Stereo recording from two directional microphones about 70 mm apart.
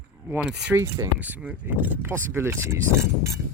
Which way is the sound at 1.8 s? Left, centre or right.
Right.